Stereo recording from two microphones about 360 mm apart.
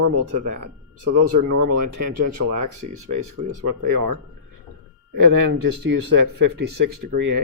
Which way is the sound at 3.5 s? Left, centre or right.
Right.